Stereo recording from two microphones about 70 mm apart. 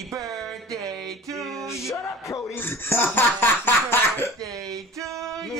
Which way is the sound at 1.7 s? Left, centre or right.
Left.